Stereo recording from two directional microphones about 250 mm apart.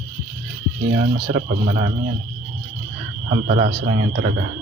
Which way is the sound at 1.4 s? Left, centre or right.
Right.